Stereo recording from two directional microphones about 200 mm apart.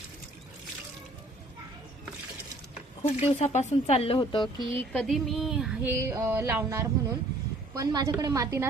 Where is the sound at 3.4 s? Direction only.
35° left (ahead or behind).